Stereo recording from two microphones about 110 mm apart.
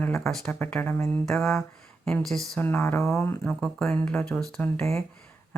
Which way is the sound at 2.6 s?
20° left (ahead or behind).